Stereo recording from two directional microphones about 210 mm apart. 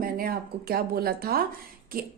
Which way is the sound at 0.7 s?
45° right (ahead or behind).